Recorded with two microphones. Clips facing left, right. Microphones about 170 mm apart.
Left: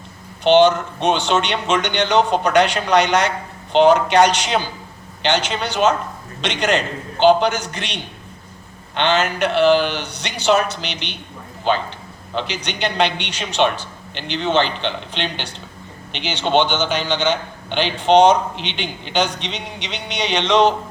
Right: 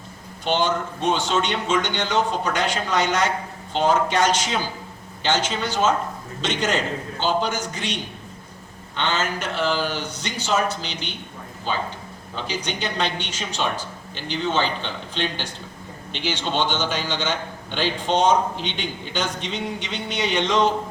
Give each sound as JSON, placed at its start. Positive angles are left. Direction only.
{"t": 0.4, "sound": "a man's voice", "side_deg": 75}
{"t": 9.0, "sound": "a man's voice", "side_deg": 70}